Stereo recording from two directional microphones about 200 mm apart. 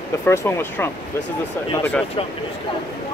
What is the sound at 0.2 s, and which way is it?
Speech, 15° left (ahead or behind).